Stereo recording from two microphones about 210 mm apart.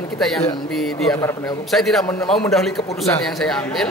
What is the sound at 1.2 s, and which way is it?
Speech, 15° left (ahead or behind).